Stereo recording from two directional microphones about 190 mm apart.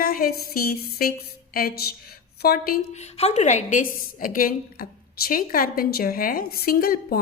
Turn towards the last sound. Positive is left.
turn(degrees=50)  # may be behind; listen again after turning